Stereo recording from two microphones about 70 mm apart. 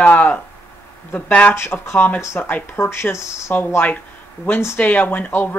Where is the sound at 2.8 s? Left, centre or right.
Left.